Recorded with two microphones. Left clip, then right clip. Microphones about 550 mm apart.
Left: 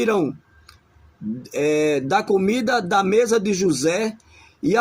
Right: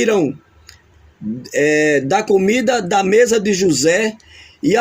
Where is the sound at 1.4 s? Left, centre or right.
Left.